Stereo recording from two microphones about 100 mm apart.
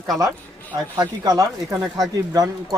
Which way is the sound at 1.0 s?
40° right (ahead or behind).